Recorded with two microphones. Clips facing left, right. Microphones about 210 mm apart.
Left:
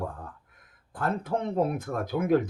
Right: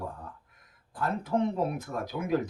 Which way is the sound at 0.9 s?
50° left (ahead or behind).